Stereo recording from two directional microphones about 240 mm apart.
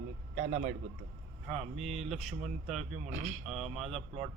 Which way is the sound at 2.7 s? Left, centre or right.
Right.